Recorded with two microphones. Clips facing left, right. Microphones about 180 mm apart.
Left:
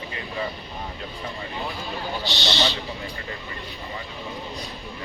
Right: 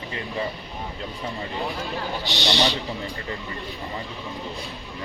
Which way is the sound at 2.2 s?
15° right (ahead or behind).